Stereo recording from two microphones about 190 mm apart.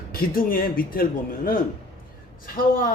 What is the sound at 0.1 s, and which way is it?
Speech, 50° left (ahead or behind).